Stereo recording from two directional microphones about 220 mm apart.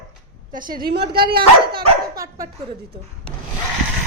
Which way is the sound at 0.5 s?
40° right (ahead or behind).